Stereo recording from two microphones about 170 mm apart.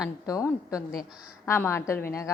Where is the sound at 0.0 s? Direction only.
20° left (ahead or behind).